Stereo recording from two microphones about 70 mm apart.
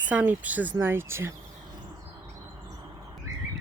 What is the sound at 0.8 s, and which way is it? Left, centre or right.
Speech, right.